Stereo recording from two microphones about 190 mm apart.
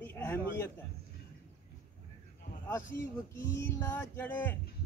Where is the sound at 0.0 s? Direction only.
10° left (ahead or behind).